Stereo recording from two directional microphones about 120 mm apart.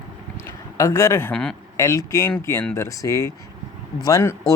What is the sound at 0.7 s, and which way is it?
Speech, 30° left (ahead or behind).